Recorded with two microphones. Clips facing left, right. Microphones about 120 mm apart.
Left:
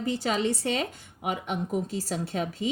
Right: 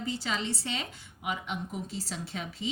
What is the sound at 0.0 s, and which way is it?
A woman's voice, 50° left (ahead or behind).